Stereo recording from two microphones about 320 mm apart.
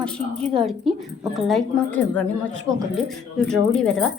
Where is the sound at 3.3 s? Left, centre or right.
Centre.